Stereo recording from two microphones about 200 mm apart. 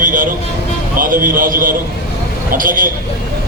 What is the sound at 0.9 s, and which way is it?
A man's voice, 45° right (ahead or behind).